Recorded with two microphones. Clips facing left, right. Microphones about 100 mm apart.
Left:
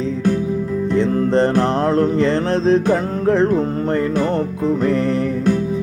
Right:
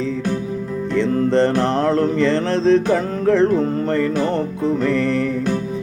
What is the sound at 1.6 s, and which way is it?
Mantra, 40° left (ahead or behind).